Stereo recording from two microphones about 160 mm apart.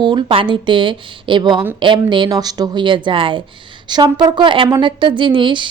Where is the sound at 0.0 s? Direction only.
30° right (ahead or behind).